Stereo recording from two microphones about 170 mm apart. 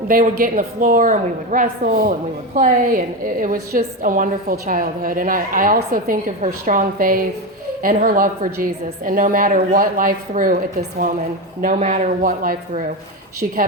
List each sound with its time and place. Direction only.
0.1 s a woman's voice: 55° right (ahead or behind)
11.6 s a woman's voice: 45° right (ahead or behind)